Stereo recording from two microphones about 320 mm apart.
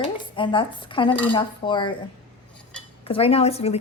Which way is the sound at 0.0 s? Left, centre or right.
Centre.